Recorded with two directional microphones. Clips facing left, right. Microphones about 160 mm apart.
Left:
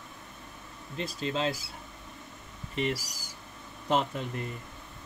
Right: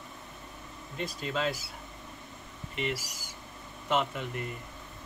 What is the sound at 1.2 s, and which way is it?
Speech, 30° left (ahead or behind).